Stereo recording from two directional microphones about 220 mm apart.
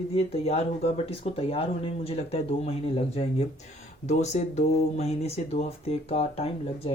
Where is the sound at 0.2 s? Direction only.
25° left (ahead or behind).